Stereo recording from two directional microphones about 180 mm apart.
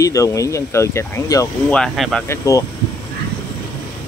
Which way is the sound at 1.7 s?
Centre (ahead or behind).